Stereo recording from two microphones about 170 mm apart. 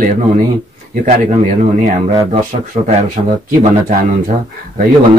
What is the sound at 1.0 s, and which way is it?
Speech, 45° right (ahead or behind).